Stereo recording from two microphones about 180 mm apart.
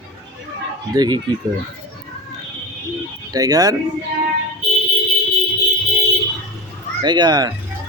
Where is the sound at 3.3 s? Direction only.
20° right (ahead or behind).